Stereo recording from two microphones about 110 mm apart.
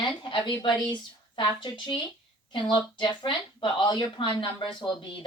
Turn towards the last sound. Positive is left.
turn(degrees=50)  # may be behind; listen again after turning